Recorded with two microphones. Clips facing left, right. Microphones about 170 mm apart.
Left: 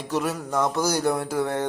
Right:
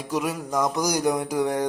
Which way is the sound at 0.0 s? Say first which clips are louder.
Even; 10° right (ahead or behind).